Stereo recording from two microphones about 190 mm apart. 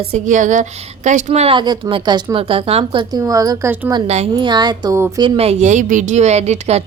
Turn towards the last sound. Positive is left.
turn(degrees=-35)  # may be behind; listen again after turning